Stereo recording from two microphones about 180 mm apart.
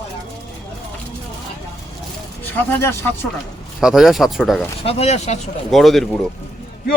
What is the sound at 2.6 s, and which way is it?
Speech, 15° left (ahead or behind).